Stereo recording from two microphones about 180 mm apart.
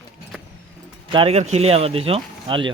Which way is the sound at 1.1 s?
35° right (ahead or behind).